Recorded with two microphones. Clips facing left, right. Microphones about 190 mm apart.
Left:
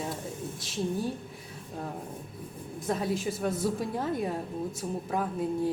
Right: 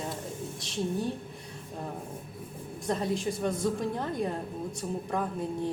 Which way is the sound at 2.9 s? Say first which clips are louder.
Even; 5° left (ahead or behind).